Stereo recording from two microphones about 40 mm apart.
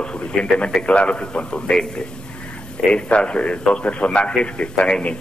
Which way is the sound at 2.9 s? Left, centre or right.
Left.